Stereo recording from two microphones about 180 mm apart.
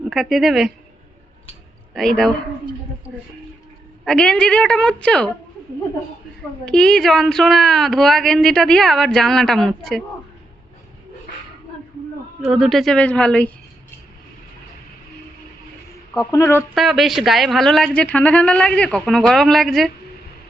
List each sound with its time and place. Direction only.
0.1 s a woman's voice: centre (ahead or behind)
1.9 s speech: centre (ahead or behind)
4.0 s a woman's voice: 5° left (ahead or behind)
6.7 s a woman's voice: 5° left (ahead or behind)
12.5 s a woman's voice: centre (ahead or behind)
16.1 s speech: 15° left (ahead or behind)
16.7 s a woman's voice: centre (ahead or behind)